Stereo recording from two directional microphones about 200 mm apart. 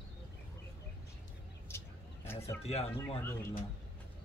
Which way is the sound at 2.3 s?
10° left (ahead or behind).